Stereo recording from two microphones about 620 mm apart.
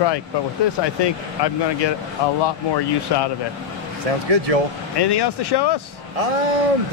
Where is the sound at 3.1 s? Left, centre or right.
Left.